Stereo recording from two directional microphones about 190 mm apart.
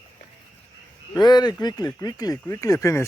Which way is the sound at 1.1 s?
20° left (ahead or behind).